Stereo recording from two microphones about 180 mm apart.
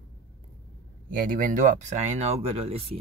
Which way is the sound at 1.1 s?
50° right (ahead or behind).